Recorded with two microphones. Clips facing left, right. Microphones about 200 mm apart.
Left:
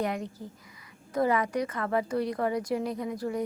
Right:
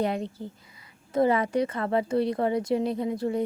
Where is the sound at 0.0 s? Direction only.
30° right (ahead or behind).